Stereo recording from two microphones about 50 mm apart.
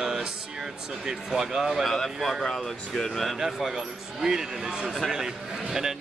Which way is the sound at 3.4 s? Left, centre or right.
Centre.